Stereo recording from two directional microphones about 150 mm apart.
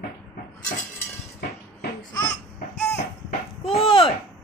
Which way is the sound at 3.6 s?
40° left (ahead or behind).